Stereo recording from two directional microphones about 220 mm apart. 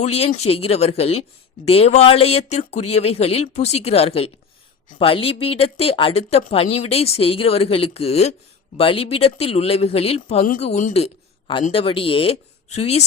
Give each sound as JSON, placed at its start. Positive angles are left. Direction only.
{"t": 0.0, "sound": "a man's voice", "side_deg": 30}